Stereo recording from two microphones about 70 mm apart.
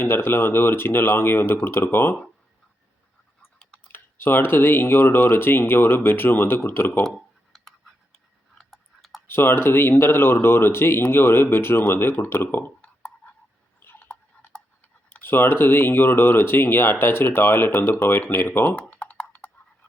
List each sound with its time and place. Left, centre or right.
0.0 s speech: left
3.9 s speech: left
7.5 s a sound: centre
8.5 s tick-tock: centre
9.2 s speech: left
13.7 s tick-tock: left
15.2 s speech: left
18.8 s typing: centre